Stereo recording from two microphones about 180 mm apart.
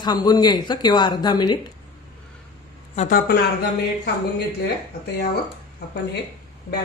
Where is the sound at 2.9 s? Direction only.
40° left (ahead or behind).